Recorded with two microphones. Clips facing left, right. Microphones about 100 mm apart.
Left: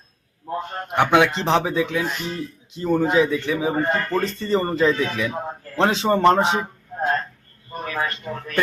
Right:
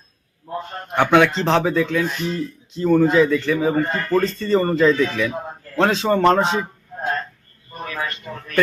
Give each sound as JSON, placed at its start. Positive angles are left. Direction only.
{"t": 0.9, "sound": "speech", "side_deg": 15}
{"t": 5.7, "sound": "a man's voice", "side_deg": 20}